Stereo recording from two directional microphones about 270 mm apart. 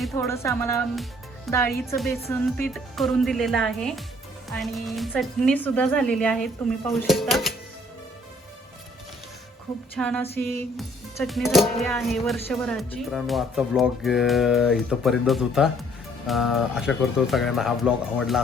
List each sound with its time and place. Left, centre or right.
0.1 s speech: centre
2.0 s music: centre
9.9 s music: centre